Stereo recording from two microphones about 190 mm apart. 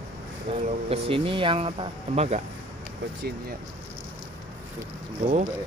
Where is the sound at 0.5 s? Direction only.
30° right (ahead or behind).